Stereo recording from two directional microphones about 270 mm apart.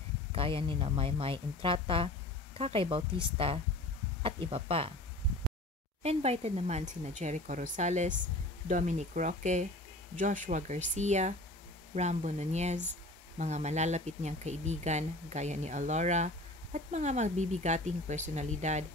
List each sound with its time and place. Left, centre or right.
0.3 s speech: centre
6.0 s speech: right